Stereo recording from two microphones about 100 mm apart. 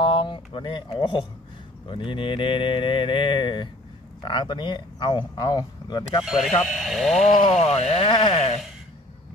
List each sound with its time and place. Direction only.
0.0 s speech: 60° left (ahead or behind)
6.2 s speech: centre (ahead or behind)
7.6 s speech: 90° left
8.1 s speech: 50° left (ahead or behind)